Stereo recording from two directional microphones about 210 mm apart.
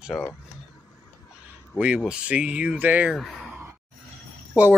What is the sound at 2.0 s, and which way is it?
Speech, 5° right (ahead or behind).